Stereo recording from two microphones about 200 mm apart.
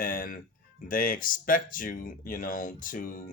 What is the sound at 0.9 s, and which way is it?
Speech, 45° left (ahead or behind).